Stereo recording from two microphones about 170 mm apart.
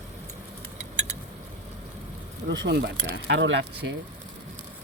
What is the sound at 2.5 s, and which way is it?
Speech, 90° right.